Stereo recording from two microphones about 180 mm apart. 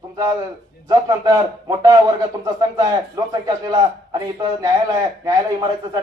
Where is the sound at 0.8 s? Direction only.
20° right (ahead or behind).